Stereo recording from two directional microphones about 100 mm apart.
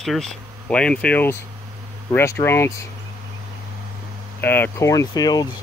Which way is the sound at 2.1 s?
25° left (ahead or behind).